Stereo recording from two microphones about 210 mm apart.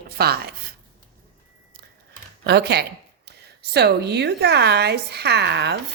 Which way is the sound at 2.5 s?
50° right (ahead or behind).